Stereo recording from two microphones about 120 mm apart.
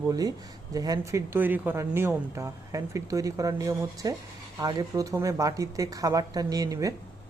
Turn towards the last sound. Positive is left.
turn(degrees=-30)  # may be behind; listen again after turning